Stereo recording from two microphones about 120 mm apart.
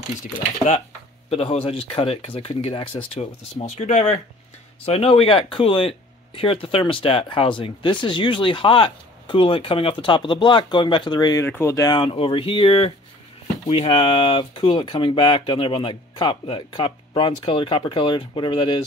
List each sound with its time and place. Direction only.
0.2 s speech: 70° left (ahead or behind)
1.3 s speech: 50° left (ahead or behind)
3.2 s speech: 65° left (ahead or behind)
4.8 s speech: 55° left (ahead or behind); by 11.4 s 35° left (ahead or behind)
11.4 s speech: 20° left (ahead or behind)
11.7 s speech: 35° left (ahead or behind)